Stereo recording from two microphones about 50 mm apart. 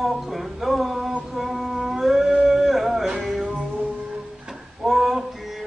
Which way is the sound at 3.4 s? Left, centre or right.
Right.